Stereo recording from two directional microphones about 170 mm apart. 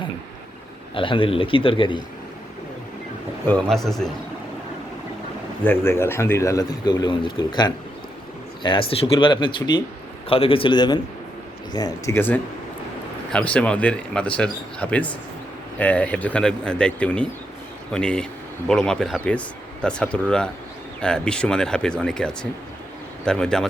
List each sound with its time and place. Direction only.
0.9 s a man's voice: 30° left (ahead or behind)
3.4 s speech: 10° left (ahead or behind)
5.6 s a man's voice: 15° left (ahead or behind)